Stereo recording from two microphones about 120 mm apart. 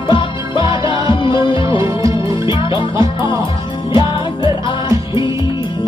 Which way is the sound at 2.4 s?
45° left (ahead or behind).